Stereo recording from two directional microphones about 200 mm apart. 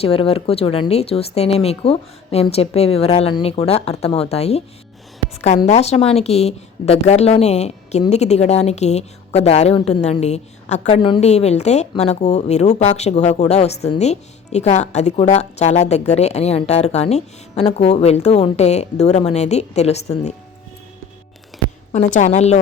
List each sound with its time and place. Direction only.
0.0 s a woman's voice: 30° left (ahead or behind)
21.9 s a woman's voice: 40° left (ahead or behind)